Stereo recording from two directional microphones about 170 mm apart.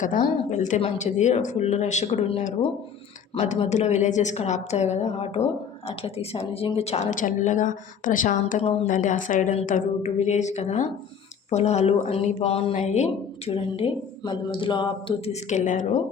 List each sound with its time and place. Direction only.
0.0 s a woman's voice: 50° left (ahead or behind)